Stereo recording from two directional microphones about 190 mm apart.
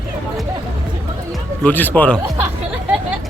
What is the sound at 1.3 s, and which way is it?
Speech, 10° left (ahead or behind).